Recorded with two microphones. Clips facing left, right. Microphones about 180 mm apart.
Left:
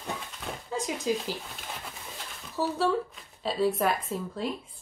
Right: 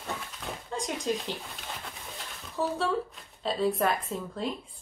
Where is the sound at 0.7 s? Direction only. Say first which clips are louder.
Left 2 dB; centre (ahead or behind).